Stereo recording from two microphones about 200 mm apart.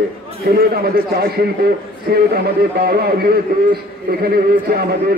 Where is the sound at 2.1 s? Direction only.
50° right (ahead or behind).